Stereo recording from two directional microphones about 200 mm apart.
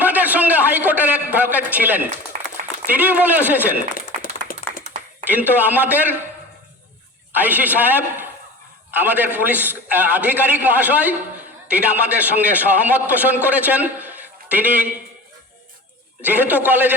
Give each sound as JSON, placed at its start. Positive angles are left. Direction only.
{"t": 0.0, "sound": "a sound", "side_deg": -10}
{"t": 2.9, "sound": "a man's voice", "side_deg": -10}
{"t": 3.9, "sound": "a sound", "side_deg": 45}
{"t": 5.2, "sound": "a man's voice", "side_deg": -10}
{"t": 7.3, "sound": "a man's voice", "side_deg": -10}
{"t": 16.2, "sound": "a man's voice", "side_deg": -10}